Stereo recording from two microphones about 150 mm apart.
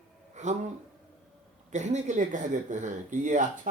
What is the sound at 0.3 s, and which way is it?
Speech, 50° right (ahead or behind).